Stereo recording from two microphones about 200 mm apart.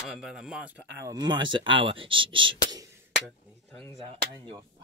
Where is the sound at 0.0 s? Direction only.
5° right (ahead or behind).